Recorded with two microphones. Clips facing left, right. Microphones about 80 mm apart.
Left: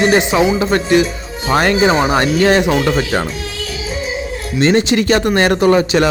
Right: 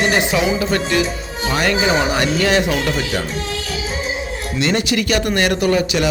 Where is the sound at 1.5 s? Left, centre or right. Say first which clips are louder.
Left 5 dB; left.